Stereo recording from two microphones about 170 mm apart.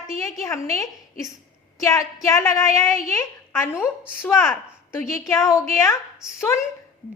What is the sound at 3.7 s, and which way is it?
Speech, 5° right (ahead or behind).